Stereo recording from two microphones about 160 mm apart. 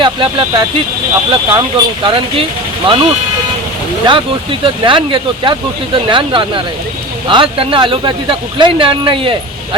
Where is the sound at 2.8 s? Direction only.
30° right (ahead or behind).